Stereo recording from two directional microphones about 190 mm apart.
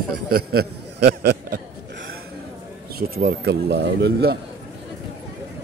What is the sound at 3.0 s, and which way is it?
Speech, 55° right (ahead or behind).